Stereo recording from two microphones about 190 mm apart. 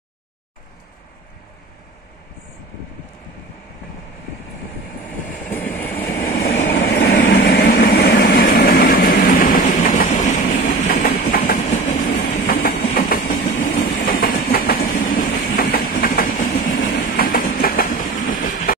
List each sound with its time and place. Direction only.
5.5 s train: 10° left (ahead or behind)
6.4 s vehicle: 65° left (ahead or behind)
7.2 s vehicle: 60° left (ahead or behind); by 10.6 s 40° left (ahead or behind)
10.7 s train: 55° left (ahead or behind)